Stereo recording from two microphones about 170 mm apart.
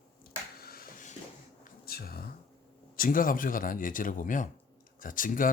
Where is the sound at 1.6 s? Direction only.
65° left (ahead or behind).